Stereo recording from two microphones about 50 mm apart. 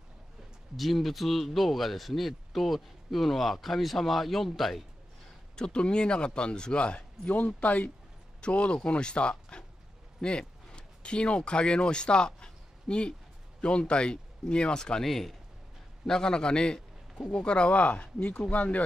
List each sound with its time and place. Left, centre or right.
0.7 s speech: centre
5.6 s a man's voice: centre